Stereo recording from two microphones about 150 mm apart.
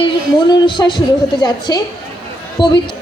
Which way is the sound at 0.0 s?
30° left (ahead or behind).